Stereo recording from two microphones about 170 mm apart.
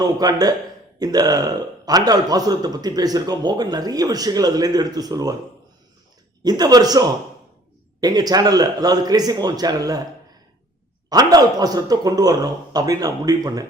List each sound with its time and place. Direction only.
0.0 s a man's voice: 20° right (ahead or behind)
6.4 s a man's voice: 25° right (ahead or behind)
11.1 s a man's voice: 20° right (ahead or behind)